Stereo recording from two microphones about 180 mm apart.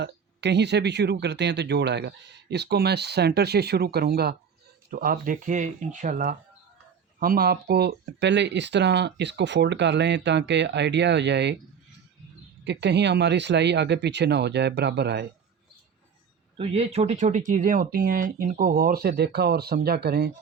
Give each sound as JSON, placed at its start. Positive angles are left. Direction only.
{"t": 0.0, "sound": "speech", "side_deg": -70}
{"t": 12.6, "sound": "speech", "side_deg": -70}
{"t": 16.6, "sound": "speech", "side_deg": -30}